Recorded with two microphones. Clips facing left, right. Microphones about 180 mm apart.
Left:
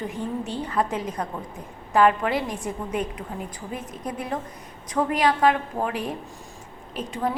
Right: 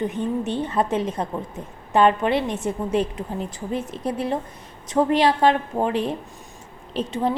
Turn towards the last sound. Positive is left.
turn(degrees=-25)  # may be behind; listen again after turning